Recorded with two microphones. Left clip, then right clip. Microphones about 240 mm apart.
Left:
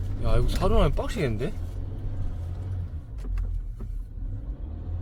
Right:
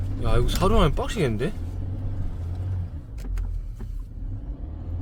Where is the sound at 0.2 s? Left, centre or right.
Centre.